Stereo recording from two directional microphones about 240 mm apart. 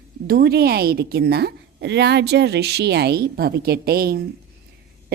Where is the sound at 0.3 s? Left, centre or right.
Right.